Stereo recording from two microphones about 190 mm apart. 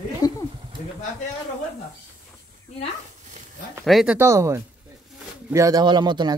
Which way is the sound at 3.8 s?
Centre (ahead or behind).